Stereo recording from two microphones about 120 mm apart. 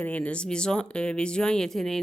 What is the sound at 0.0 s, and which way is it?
Speech, 10° left (ahead or behind).